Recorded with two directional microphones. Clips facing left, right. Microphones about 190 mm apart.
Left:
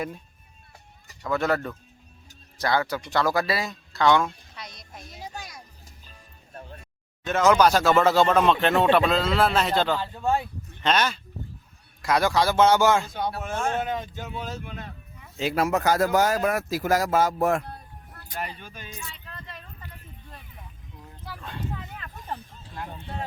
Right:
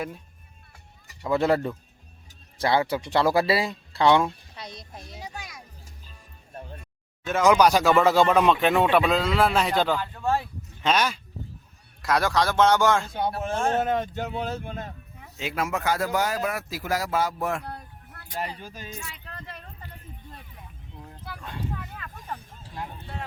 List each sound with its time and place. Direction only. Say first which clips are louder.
1.3 s speech: right 3 dB; 30° right (ahead or behind)
7.3 s speech: even; 10° right (ahead or behind)
10.0 s speech: left 1 dB; 20° left (ahead or behind)
10.8 s speech: even; 10° right (ahead or behind)
13.1 s speech: right 2 dB; 30° right (ahead or behind)
13.9 s speech: right 5 dB; 65° right (ahead or behind); by 15.3 s 45° right (ahead or behind)
15.4 s speech: left 5 dB; 35° left (ahead or behind)
17.7 s vehicle: right 3 dB; 65° right (ahead or behind)
18.3 s speech: right 2 dB; 35° right (ahead or behind)
21.2 s a sound: even; 5° right (ahead or behind)